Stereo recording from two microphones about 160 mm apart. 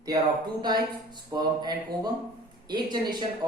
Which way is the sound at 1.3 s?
25° right (ahead or behind).